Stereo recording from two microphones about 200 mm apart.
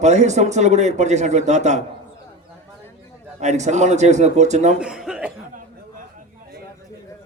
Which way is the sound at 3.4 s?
35° right (ahead or behind).